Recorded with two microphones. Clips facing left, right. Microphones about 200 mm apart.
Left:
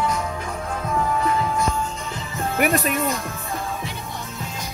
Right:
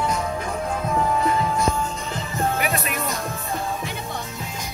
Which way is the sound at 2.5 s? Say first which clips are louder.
Left 5 dB; 50° left (ahead or behind).